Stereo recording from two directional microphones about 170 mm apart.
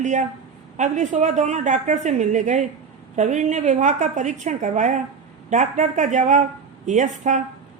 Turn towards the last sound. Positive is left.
turn(degrees=-45)  # may be behind; listen again after turning